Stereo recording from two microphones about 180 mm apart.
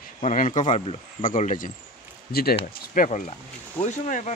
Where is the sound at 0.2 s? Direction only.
40° left (ahead or behind).